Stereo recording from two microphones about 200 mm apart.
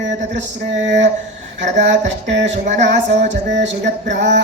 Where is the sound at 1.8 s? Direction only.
65° right (ahead or behind).